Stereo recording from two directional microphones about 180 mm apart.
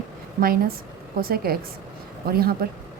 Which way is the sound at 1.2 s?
55° right (ahead or behind).